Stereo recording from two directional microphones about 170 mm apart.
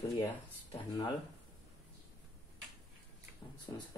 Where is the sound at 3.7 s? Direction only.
20° left (ahead or behind).